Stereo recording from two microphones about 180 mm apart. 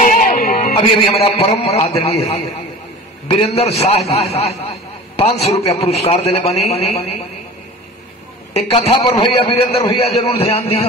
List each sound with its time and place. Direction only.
0.0 s music: 45° left (ahead or behind)
0.7 s a man's voice: 35° left (ahead or behind)
8.5 s a man's voice: 35° left (ahead or behind)